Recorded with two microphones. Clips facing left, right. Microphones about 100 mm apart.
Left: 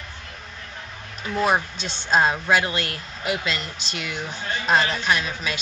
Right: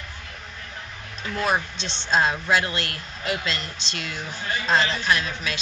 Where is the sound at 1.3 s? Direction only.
20° left (ahead or behind).